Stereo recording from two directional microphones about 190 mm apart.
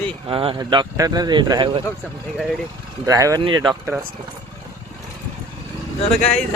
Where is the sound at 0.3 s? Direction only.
25° right (ahead or behind).